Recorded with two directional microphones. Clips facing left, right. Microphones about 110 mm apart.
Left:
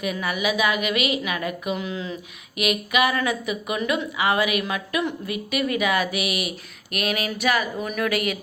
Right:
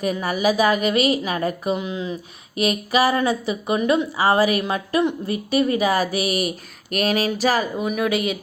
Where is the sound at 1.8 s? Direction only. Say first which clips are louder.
Right 3 dB; 20° right (ahead or behind).